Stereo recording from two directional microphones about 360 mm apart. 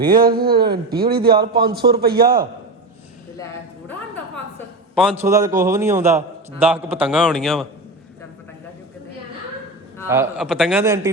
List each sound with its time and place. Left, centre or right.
0.0 s a man's voice: right
4.9 s a man's voice: centre
10.1 s a man's voice: centre